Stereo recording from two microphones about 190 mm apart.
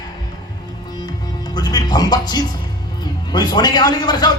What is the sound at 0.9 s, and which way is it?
Music, 20° left (ahead or behind).